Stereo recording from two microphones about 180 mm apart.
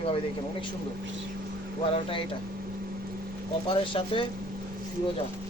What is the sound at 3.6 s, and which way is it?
Speech, 30° left (ahead or behind).